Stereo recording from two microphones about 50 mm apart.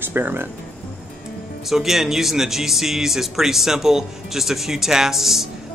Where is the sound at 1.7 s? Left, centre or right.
Centre.